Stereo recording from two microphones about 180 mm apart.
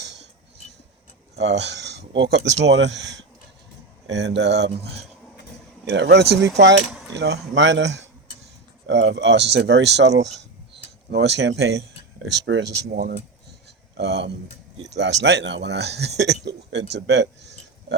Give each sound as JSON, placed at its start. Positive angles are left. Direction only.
{"t": 1.5, "sound": "speech", "side_deg": -70}
{"t": 11.1, "sound": "speech", "side_deg": -75}
{"t": 12.9, "sound": "speech", "side_deg": -55}
{"t": 13.9, "sound": "speech", "side_deg": -70}
{"t": 16.4, "sound": "a sound", "side_deg": -70}